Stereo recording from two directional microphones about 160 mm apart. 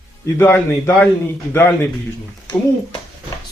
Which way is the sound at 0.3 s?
15° left (ahead or behind).